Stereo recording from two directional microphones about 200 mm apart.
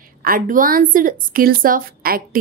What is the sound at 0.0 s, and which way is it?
A woman's voice, 45° right (ahead or behind).